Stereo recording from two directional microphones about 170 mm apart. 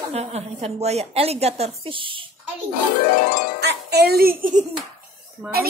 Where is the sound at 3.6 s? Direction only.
75° right (ahead or behind); by 4.6 s 55° right (ahead or behind).